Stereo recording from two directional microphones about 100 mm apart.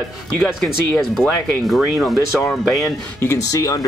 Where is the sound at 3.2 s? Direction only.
25° left (ahead or behind).